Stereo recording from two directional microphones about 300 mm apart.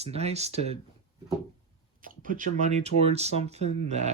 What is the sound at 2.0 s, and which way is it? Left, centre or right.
Speech, right.